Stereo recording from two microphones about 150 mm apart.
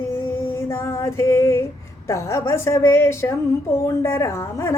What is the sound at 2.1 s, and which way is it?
A woman's voice, 20° left (ahead or behind).